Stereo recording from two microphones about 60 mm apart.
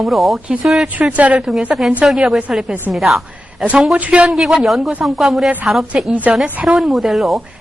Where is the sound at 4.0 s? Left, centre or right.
Centre.